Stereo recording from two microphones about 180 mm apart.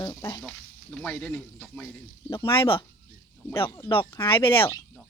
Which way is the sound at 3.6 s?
15° left (ahead or behind).